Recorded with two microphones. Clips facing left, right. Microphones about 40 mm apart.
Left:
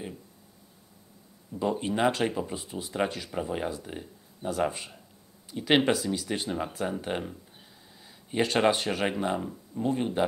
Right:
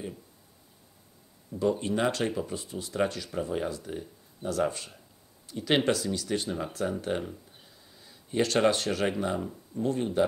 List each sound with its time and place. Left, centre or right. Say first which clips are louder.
1.6 s speech: even; centre